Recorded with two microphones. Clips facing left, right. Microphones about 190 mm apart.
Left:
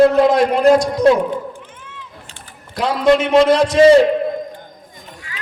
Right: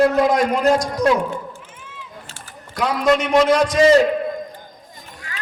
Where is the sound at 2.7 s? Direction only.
30° left (ahead or behind).